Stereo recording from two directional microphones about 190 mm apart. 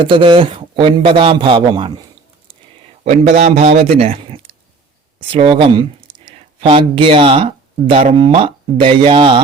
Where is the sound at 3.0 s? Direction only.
35° right (ahead or behind).